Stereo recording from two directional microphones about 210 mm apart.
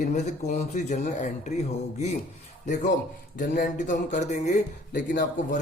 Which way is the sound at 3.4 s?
40° left (ahead or behind).